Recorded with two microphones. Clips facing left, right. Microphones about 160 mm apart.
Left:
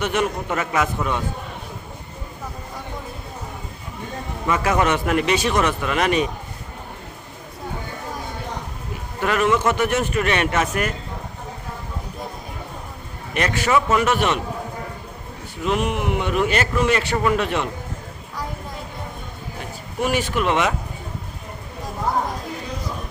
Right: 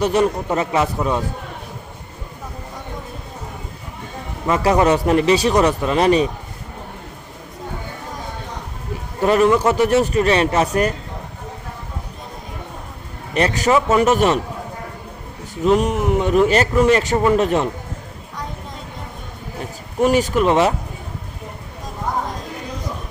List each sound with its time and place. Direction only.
0.0 s a man's voice: 35° right (ahead or behind)
4.4 s a man's voice: 35° right (ahead or behind)
9.2 s a man's voice: 35° right (ahead or behind)
13.3 s a man's voice: 35° right (ahead or behind)
15.6 s a man's voice: 40° right (ahead or behind)
20.0 s a man's voice: 40° right (ahead or behind)